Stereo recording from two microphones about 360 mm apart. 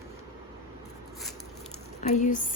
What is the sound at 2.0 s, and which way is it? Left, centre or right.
Speech, centre.